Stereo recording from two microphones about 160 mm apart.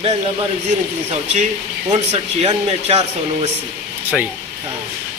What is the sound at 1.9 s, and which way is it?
Speech, 40° right (ahead or behind).